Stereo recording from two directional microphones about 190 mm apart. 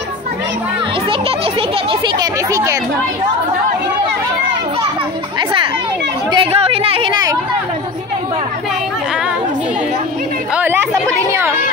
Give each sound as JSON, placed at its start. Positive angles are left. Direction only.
{"t": 1.9, "sound": "speech", "side_deg": -20}
{"t": 6.3, "sound": "speech", "side_deg": -30}
{"t": 10.5, "sound": "speech", "side_deg": -10}